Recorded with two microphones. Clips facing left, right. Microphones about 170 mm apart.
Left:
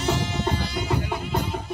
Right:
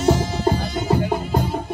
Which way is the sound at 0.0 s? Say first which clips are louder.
Right 7 dB; 45° right (ahead or behind).